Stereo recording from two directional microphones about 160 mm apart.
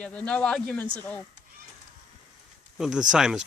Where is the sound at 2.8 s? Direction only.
5° right (ahead or behind).